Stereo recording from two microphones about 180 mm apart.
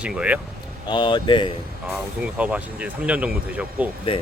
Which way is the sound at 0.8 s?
25° left (ahead or behind).